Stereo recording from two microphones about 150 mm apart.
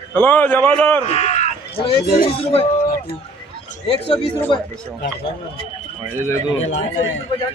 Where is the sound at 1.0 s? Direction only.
45° left (ahead or behind).